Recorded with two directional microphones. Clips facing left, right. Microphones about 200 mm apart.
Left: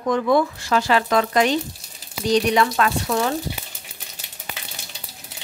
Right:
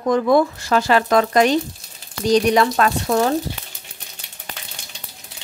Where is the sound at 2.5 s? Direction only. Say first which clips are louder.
Right 3 dB; 40° right (ahead or behind).